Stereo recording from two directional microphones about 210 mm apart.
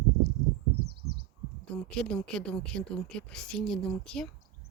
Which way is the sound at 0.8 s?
50° right (ahead or behind).